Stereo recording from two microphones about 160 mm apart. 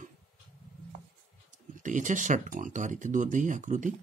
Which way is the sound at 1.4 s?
55° right (ahead or behind).